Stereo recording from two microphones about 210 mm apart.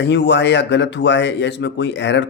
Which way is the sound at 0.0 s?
55° left (ahead or behind).